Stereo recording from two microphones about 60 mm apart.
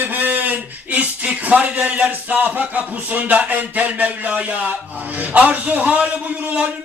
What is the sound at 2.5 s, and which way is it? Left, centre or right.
Speech, right.